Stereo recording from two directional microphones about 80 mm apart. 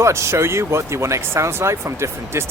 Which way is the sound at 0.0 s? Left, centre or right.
Right.